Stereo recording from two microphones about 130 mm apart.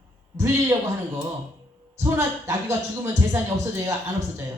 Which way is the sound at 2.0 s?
25° right (ahead or behind).